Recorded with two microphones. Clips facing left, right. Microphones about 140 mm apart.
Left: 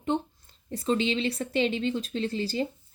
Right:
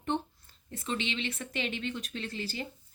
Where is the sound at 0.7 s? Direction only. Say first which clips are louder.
Left 9 dB; 35° left (ahead or behind).